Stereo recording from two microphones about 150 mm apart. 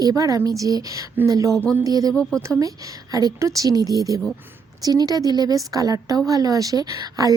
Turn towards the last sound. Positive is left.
turn(degrees=-25)  # may be behind; listen again after turning